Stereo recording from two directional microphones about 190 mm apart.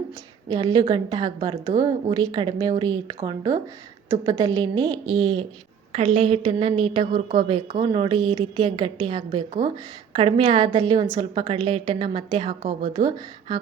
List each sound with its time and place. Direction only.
0.5 s a woman's voice: 20° right (ahead or behind)